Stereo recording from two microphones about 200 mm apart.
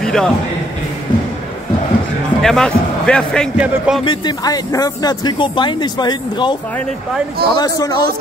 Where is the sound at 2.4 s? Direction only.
5° left (ahead or behind).